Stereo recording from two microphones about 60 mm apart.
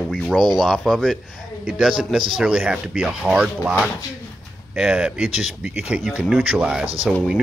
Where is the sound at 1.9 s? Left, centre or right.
Centre.